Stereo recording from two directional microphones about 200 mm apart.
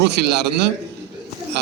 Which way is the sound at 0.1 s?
55° right (ahead or behind).